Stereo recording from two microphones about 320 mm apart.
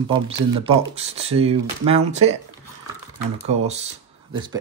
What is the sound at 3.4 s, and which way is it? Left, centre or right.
Speech, centre.